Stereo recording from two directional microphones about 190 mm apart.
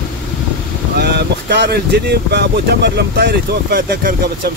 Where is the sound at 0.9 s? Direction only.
60° right (ahead or behind).